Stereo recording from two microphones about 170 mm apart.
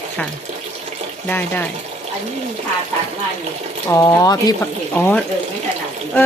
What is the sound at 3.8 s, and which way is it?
Speech, 20° left (ahead or behind).